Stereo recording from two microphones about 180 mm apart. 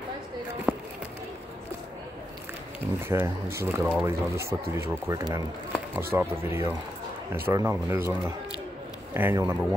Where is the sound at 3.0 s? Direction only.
15° right (ahead or behind).